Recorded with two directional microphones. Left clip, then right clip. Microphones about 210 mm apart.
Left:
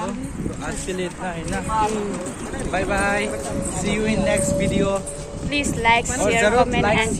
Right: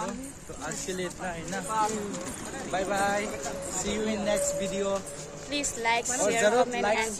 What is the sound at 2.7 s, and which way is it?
A woman's voice, 10° right (ahead or behind).